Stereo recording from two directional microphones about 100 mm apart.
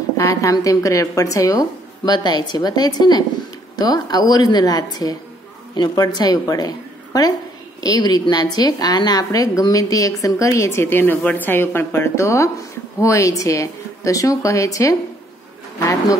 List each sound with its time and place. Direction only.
0.2 s a woman's voice: 35° left (ahead or behind)